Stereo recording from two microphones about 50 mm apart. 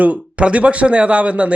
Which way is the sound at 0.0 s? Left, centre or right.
Right.